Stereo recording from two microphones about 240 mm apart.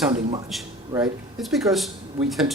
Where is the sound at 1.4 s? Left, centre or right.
Centre.